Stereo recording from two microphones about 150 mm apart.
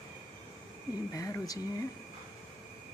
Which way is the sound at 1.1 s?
25° left (ahead or behind).